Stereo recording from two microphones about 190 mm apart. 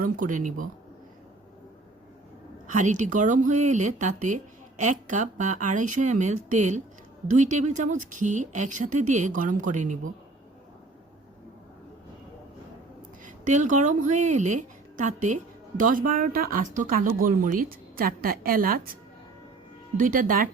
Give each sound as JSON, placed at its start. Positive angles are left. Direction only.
{"t": 0.0, "sound": "speech", "side_deg": -45}
{"t": 2.7, "sound": "speech", "side_deg": -40}
{"t": 13.2, "sound": "a woman's voice", "side_deg": -40}
{"t": 20.0, "sound": "speech", "side_deg": -45}